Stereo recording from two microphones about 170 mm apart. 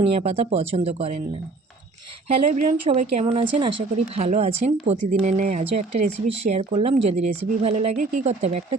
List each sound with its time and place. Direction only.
0.0 s speech: 40° right (ahead or behind)
2.4 s speech: 45° right (ahead or behind)